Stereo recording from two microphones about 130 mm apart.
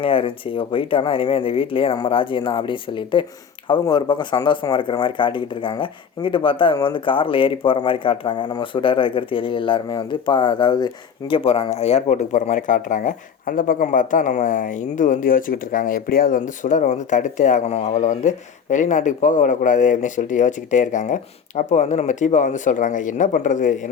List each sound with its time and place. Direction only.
0.0 s speech: 40° left (ahead or behind)
11.3 s speech: 45° left (ahead or behind); by 23.7 s 80° left